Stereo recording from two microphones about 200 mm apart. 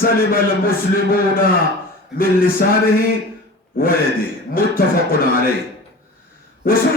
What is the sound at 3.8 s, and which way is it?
A man's voice, 50° left (ahead or behind).